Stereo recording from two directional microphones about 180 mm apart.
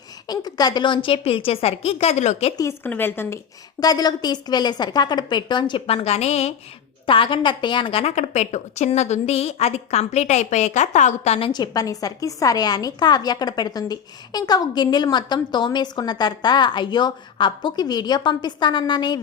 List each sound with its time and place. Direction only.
0.3 s a woman's voice: 20° left (ahead or behind); by 2.5 s 40° left (ahead or behind)
2.6 s a woman's voice: 15° left (ahead or behind)